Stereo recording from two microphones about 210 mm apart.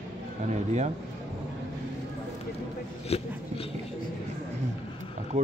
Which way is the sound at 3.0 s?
30° left (ahead or behind).